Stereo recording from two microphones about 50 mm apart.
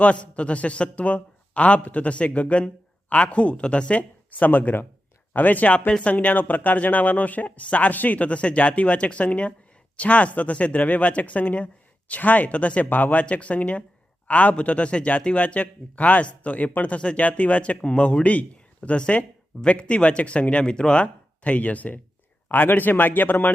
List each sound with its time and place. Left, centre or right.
0.0 s speech: left
4.3 s speech: left